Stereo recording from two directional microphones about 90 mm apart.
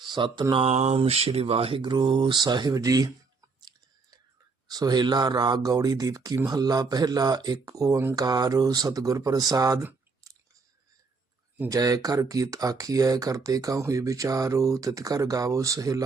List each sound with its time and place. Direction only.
0.1 s mantra: 55° right (ahead or behind)
0.5 s mantra: 90° right; by 2.4 s 75° right (ahead or behind)
2.4 s speech: 50° right (ahead or behind)
3.6 s chewing: 50° right (ahead or behind)
4.7 s speech: 50° right (ahead or behind)
10.2 s chewing: 35° right (ahead or behind)
11.7 s speech: 40° right (ahead or behind)